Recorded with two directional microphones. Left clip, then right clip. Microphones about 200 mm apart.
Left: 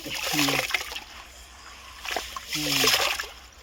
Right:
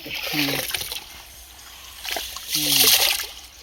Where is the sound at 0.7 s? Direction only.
10° left (ahead or behind).